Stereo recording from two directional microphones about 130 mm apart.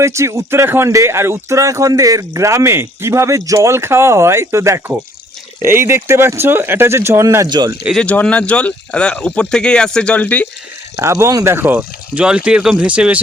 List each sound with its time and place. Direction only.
0.0 s speech: 20° right (ahead or behind)
7.9 s speech: 10° left (ahead or behind)
10.9 s speech: 20° right (ahead or behind)